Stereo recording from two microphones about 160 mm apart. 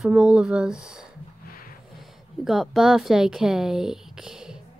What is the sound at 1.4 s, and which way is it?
Music, 65° left (ahead or behind).